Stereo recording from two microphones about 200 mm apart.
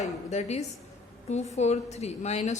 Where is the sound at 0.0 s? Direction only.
35° left (ahead or behind).